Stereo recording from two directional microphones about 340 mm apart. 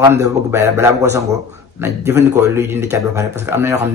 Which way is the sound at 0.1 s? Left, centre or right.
Centre.